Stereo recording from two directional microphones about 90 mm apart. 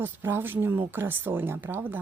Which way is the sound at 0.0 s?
25° right (ahead or behind).